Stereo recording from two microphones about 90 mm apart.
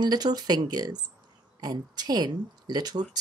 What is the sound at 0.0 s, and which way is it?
Speech, 50° right (ahead or behind).